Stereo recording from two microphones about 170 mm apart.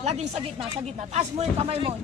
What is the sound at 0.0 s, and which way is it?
Speech, 40° right (ahead or behind).